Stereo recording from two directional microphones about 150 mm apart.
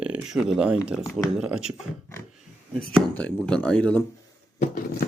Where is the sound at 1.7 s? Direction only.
15° left (ahead or behind).